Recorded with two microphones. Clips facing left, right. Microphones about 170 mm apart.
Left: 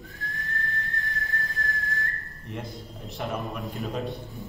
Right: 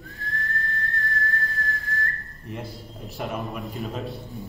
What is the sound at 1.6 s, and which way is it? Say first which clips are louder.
Whistle: right 2 dB; 20° left (ahead or behind).